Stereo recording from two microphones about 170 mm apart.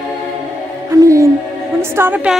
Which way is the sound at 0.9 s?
20° right (ahead or behind).